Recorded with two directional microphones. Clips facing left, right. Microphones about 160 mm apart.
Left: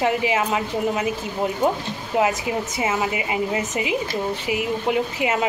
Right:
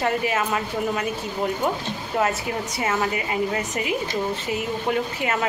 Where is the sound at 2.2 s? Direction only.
15° left (ahead or behind).